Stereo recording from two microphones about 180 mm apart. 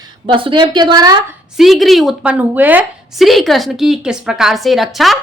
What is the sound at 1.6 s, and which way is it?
A woman's voice, centre (ahead or behind).